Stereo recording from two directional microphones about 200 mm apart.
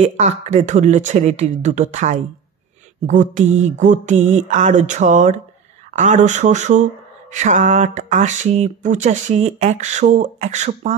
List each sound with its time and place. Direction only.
0.0 s speech: 35° right (ahead or behind)